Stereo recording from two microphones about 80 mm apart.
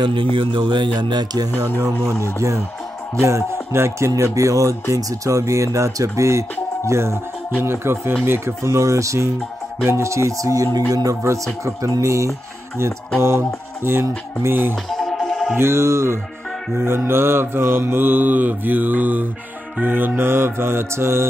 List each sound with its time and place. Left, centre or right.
0.0 s speech: right
1.8 s speech: right
4.1 s speech: right
14.5 s mantra: right
14.9 s music: centre
15.5 s speech: right
16.8 s mantra: right